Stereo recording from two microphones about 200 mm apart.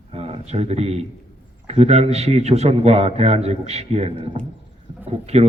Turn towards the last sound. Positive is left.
turn(degrees=-30)  # may be behind; listen again after turning